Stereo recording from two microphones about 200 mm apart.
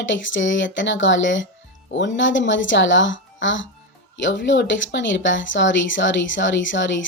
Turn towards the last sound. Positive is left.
turn(degrees=65)  # may be behind; listen again after turning